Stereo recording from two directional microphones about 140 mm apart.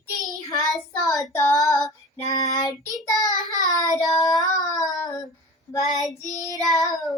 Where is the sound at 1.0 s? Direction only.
Centre (ahead or behind).